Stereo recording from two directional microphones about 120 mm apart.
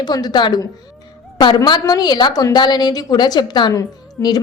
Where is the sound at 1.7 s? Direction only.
35° left (ahead or behind).